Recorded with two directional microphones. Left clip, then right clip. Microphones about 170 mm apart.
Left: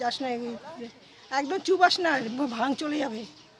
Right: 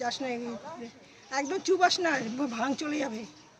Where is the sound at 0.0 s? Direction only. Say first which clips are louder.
Left 3 dB; 25° left (ahead or behind).